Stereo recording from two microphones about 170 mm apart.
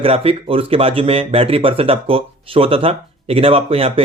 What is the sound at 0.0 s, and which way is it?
Speech, 35° right (ahead or behind).